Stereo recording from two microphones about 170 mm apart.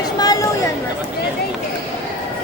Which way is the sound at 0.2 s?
20° left (ahead or behind).